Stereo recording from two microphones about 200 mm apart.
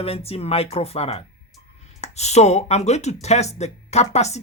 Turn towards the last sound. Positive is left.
turn(degrees=35)  # may be behind; listen again after turning